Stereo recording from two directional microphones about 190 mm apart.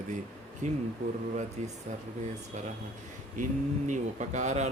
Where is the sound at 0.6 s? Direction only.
40° right (ahead or behind).